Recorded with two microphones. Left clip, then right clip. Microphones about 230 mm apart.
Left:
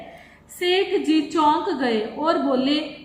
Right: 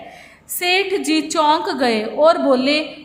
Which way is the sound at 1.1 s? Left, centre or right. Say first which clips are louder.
Right 4 dB; right.